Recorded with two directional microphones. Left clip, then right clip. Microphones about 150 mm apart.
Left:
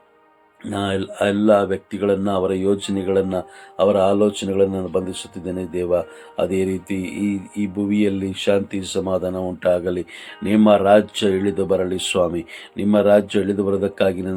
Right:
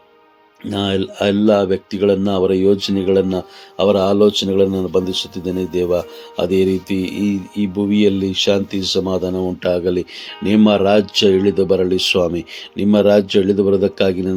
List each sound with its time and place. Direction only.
0.6 s speech: 55° right (ahead or behind)
9.3 s speech: 40° right (ahead or behind)
9.6 s speech: 60° right (ahead or behind)
10.4 s speech: 50° right (ahead or behind); by 14.3 s 70° right (ahead or behind)